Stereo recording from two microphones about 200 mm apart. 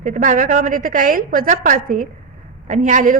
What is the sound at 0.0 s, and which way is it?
A woman's voice, 40° right (ahead or behind).